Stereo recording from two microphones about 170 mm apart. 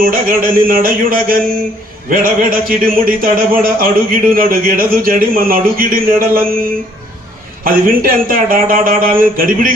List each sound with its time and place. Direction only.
0.0 s speech: 55° right (ahead or behind)